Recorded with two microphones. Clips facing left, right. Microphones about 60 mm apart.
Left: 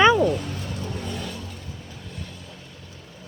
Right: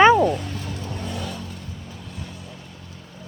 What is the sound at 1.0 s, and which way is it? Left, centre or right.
Vehicle, centre.